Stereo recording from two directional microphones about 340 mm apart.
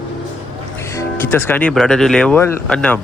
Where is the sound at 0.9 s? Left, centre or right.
Centre.